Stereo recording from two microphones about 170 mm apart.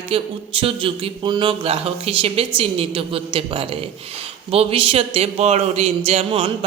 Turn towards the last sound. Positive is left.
turn(degrees=-35)  # may be behind; listen again after turning